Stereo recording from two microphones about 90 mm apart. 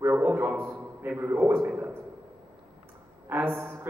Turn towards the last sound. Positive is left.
turn(degrees=-20)  # may be behind; listen again after turning